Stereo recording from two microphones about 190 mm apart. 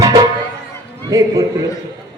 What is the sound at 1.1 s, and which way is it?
Speech, 15° right (ahead or behind).